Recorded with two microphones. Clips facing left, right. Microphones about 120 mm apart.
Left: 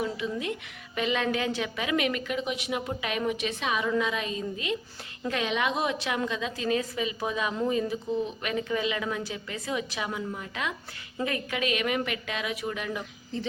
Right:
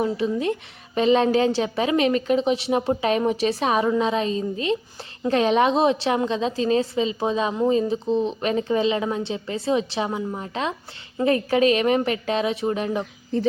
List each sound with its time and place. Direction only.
0.0 s a woman's voice: 35° right (ahead or behind)